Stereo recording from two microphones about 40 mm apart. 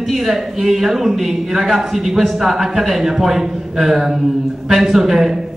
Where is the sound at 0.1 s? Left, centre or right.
Centre.